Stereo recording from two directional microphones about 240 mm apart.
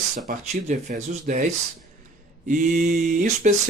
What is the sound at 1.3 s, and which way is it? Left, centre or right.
Speech, right.